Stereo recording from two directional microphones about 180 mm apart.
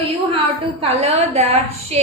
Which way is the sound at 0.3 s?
35° right (ahead or behind).